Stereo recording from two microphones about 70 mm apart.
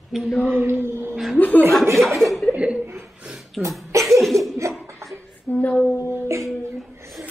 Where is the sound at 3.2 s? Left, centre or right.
Centre.